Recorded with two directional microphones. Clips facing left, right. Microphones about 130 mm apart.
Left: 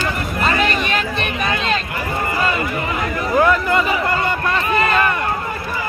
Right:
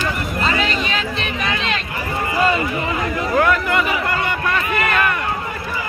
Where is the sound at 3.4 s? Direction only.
30° left (ahead or behind).